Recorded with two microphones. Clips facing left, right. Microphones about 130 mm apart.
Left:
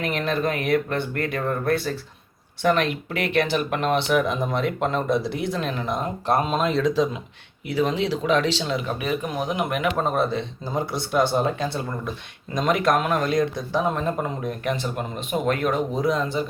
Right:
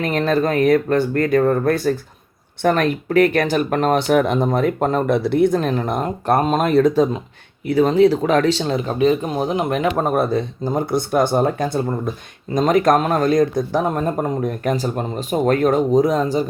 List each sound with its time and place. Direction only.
0.0 s speech: 40° right (ahead or behind)
4.2 s speech: 65° right (ahead or behind)
4.4 s speech: 45° right (ahead or behind)
5.0 s speech: 60° right (ahead or behind); by 9.9 s 30° right (ahead or behind)
10.0 s speech: 50° right (ahead or behind)